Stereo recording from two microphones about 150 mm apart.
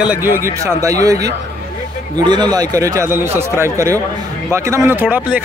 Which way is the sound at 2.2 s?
30° right (ahead or behind).